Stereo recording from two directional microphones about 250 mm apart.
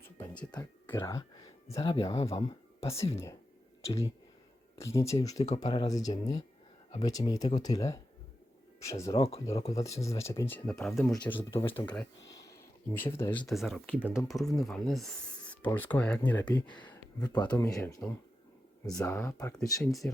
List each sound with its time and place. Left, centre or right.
0.0 s a sound: centre
1.6 s speech: centre
4.8 s speech: centre
11.6 s speech: left
11.9 s speech: centre
16.8 s a sound: centre
17.5 s speech: centre